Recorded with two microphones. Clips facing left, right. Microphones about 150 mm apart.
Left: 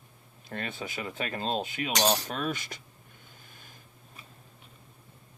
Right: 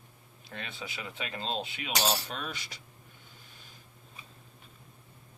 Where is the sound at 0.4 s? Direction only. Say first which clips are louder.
Left 6 dB; 50° left (ahead or behind).